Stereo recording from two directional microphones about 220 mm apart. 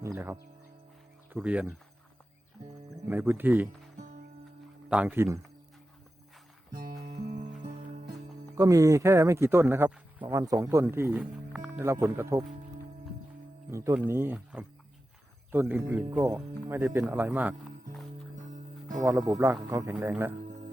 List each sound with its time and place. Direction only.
0.0 s music: 10° right (ahead or behind)
1.3 s speech: 5° right (ahead or behind)
2.9 s speech: 10° right (ahead or behind)
4.9 s speech: 5° right (ahead or behind)
7.1 s music: 30° right (ahead or behind)
8.5 s speech: 15° right (ahead or behind)
13.7 s speech: 15° right (ahead or behind)
19.0 s speech: 15° right (ahead or behind)